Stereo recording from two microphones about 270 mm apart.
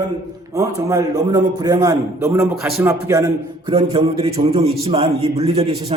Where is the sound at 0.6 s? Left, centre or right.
Centre.